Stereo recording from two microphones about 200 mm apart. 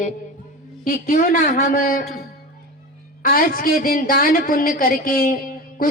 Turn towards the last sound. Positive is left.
turn(degrees=45)  # may be behind; listen again after turning